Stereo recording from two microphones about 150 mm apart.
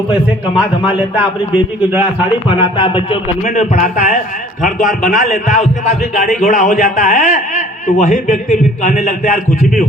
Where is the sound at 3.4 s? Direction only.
55° left (ahead or behind).